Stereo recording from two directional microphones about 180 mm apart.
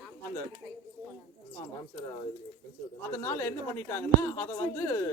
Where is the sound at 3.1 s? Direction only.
15° left (ahead or behind).